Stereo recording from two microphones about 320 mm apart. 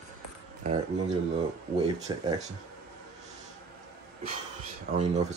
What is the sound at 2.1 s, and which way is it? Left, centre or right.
Speech, centre.